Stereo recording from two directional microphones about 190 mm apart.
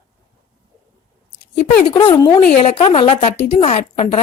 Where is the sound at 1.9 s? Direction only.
25° left (ahead or behind).